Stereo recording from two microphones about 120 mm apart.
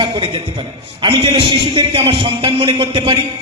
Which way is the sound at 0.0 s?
45° right (ahead or behind).